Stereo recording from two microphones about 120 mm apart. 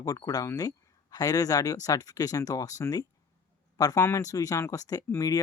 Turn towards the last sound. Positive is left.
turn(degrees=30)  # may be behind; listen again after turning